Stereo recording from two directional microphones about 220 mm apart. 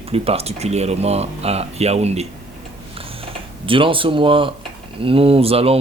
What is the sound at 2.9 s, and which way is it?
Typing, 25° right (ahead or behind).